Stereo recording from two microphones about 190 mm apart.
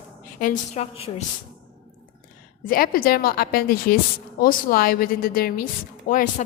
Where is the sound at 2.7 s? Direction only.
50° left (ahead or behind).